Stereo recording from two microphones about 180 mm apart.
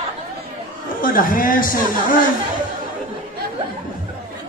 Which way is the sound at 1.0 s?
50° left (ahead or behind).